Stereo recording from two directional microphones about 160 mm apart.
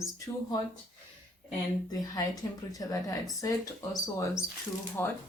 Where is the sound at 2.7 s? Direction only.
20° left (ahead or behind).